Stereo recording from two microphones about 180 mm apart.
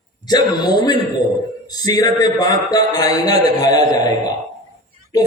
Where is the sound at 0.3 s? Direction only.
20° left (ahead or behind).